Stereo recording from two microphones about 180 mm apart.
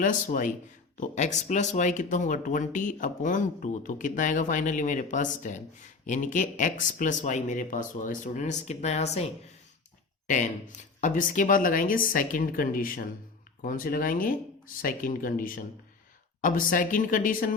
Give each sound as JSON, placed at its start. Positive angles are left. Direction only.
{"t": 0.0, "sound": "speech", "side_deg": 45}